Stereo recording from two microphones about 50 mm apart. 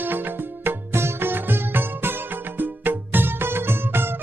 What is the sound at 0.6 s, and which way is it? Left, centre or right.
Music, right.